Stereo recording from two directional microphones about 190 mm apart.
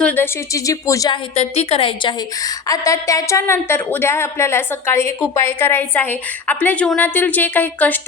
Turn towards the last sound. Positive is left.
turn(degrees=10)  # may be behind; listen again after turning